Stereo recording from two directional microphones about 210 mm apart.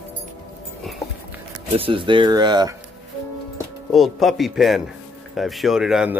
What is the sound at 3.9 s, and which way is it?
A man's voice, centre (ahead or behind).